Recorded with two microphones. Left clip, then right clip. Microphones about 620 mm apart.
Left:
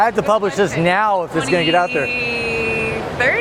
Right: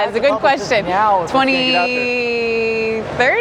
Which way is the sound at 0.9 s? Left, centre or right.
Left.